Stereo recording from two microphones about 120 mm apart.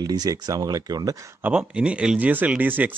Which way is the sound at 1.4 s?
10° right (ahead or behind).